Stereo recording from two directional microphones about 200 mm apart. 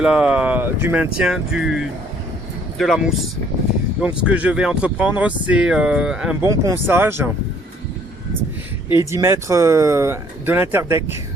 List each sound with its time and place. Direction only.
0.0 s speech: 5° right (ahead or behind)
9.0 s speech: 15° right (ahead or behind)